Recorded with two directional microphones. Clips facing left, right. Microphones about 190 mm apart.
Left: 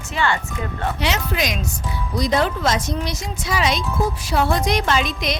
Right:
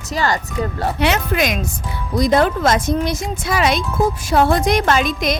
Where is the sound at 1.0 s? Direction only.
55° right (ahead or behind).